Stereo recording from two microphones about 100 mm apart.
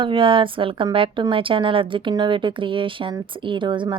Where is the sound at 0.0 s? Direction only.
55° right (ahead or behind).